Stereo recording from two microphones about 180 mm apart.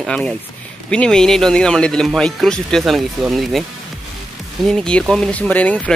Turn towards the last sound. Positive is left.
turn(degrees=5)  # may be behind; listen again after turning